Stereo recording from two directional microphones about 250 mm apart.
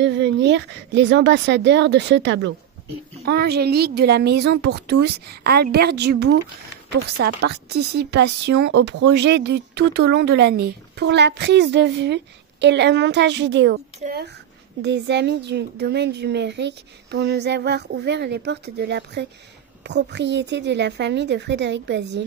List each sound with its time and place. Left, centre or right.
0.0 s a woman's voice: right
14.8 s speech: right